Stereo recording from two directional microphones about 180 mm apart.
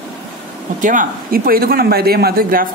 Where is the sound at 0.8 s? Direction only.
45° right (ahead or behind).